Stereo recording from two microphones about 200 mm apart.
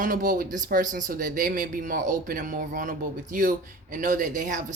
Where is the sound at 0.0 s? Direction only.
45° right (ahead or behind).